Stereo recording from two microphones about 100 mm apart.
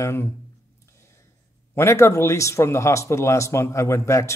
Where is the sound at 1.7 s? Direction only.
25° left (ahead or behind).